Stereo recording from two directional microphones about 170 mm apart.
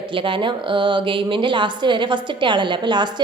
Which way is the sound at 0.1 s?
30° right (ahead or behind).